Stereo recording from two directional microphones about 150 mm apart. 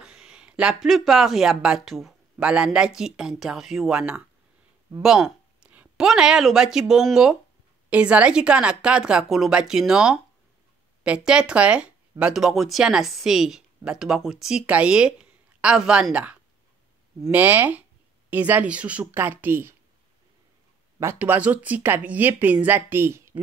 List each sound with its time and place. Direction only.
0.0 s a woman's voice: 5° right (ahead or behind)
21.0 s speech: 15° right (ahead or behind)